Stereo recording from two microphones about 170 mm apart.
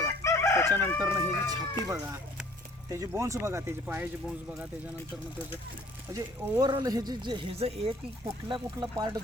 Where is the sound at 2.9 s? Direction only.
15° right (ahead or behind).